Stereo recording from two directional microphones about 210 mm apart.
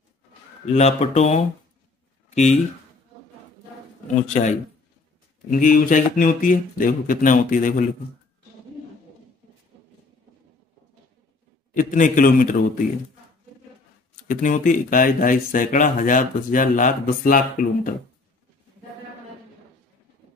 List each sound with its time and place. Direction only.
0.7 s speech: 30° left (ahead or behind)
4.3 s speech: 35° left (ahead or behind)
11.7 s speech: 40° left (ahead or behind)
14.2 s speech: 35° left (ahead or behind)